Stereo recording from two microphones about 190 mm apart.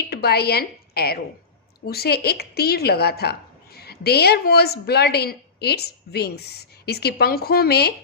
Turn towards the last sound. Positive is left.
turn(degrees=55)  # may be behind; listen again after turning